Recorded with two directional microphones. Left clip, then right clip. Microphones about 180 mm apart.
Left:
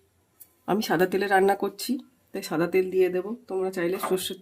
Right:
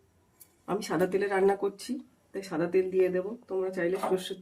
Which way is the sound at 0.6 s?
60° left (ahead or behind).